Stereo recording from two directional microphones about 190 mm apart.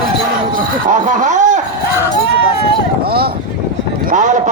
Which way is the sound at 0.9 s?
40° right (ahead or behind).